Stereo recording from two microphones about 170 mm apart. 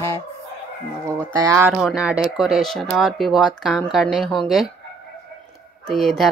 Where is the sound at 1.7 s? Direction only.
5° right (ahead or behind).